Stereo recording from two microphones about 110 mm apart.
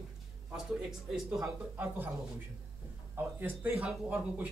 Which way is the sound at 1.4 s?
25° right (ahead or behind).